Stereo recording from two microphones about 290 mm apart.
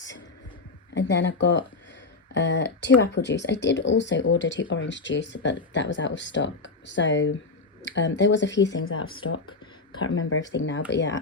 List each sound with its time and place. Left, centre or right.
0.9 s speech: left